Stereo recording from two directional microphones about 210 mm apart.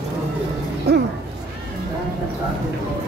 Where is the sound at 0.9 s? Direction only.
50° right (ahead or behind).